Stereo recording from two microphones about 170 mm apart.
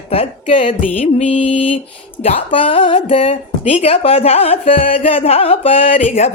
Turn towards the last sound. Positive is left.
turn(degrees=40)  # may be behind; listen again after turning